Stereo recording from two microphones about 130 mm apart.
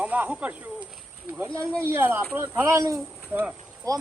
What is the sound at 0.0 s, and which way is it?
Speech, 10° right (ahead or behind).